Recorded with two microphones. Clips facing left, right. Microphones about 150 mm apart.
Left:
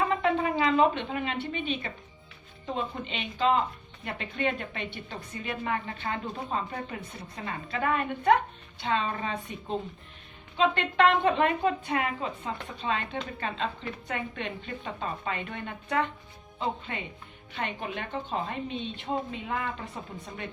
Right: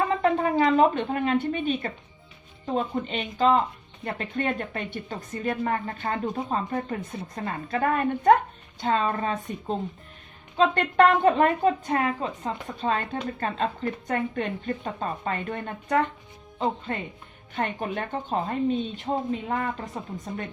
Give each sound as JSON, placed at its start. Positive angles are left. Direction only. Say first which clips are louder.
{"t": 0.2, "sound": "a woman's voice", "louder": "right 4 dB", "side_deg": -45}